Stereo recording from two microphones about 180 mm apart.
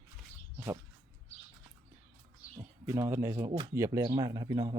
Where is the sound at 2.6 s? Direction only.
15° right (ahead or behind).